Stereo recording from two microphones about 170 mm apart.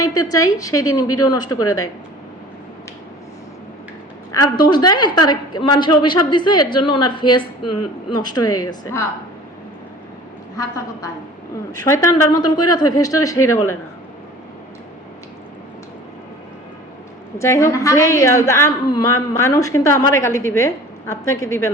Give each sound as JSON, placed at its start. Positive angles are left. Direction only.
{"t": 0.0, "sound": "a woman's voice", "side_deg": 20}
{"t": 4.3, "sound": "a woman's voice", "side_deg": 20}
{"t": 11.9, "sound": "a woman's voice", "side_deg": 20}
{"t": 17.3, "sound": "a woman's voice", "side_deg": 15}